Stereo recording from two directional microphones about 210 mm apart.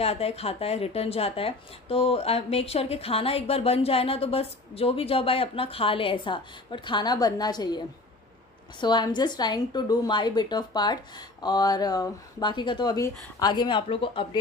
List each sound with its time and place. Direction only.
0.0 s speech: 30° left (ahead or behind)